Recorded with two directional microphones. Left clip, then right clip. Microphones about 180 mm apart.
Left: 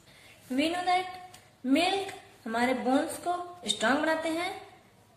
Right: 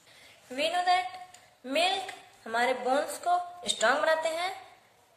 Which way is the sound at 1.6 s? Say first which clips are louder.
Left 1 dB; 30° right (ahead or behind).